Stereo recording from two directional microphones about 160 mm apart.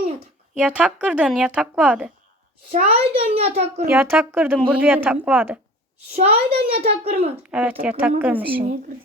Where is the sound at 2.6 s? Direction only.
60° right (ahead or behind).